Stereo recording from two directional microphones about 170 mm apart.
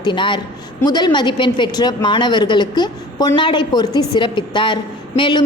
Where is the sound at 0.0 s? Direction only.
30° left (ahead or behind).